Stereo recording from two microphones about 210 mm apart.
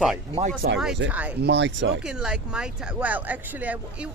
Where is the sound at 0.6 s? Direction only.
50° right (ahead or behind).